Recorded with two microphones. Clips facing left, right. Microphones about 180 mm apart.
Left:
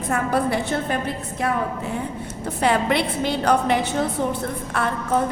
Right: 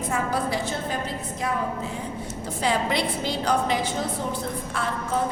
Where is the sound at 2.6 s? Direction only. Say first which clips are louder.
Left 4 dB; 60° left (ahead or behind).